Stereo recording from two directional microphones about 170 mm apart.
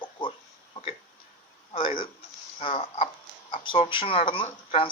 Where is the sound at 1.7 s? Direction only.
30° left (ahead or behind).